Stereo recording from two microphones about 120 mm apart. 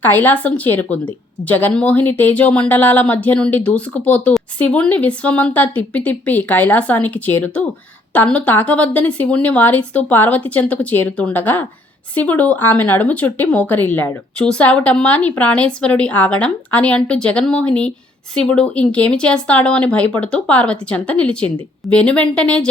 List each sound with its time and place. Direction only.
0.0 s speech: 15° left (ahead or behind)